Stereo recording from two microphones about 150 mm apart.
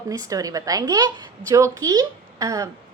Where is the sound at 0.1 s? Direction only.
25° right (ahead or behind).